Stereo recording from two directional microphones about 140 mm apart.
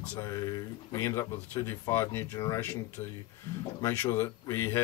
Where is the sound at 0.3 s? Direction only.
25° left (ahead or behind).